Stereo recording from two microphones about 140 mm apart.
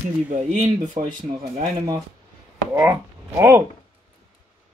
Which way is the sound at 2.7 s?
15° right (ahead or behind).